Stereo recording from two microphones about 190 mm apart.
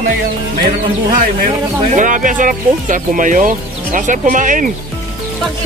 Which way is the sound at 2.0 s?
45° right (ahead or behind).